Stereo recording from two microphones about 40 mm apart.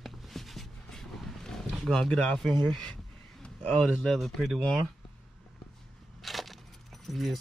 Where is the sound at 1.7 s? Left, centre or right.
Centre.